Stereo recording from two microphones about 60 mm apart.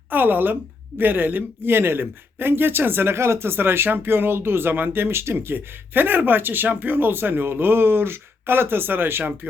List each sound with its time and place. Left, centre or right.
0.1 s speech: right